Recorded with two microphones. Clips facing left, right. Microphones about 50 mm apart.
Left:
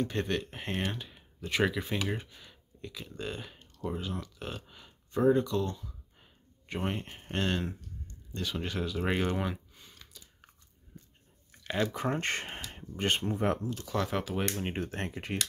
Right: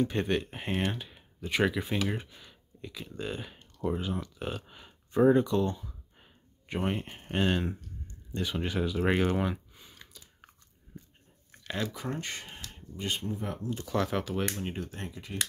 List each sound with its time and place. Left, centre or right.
0.0 s speech: centre
6.7 s speech: centre
8.4 s a sound: centre
11.6 s a sound: centre
11.9 s speech: left
13.8 s speech: centre
14.7 s speech: left